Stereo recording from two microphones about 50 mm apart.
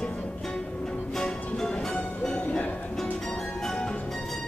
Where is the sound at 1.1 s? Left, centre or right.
Centre.